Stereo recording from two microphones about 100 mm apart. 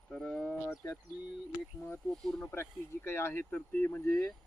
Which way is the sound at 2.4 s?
25° left (ahead or behind).